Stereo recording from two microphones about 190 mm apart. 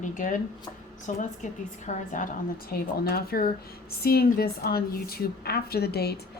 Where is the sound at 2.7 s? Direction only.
55° left (ahead or behind).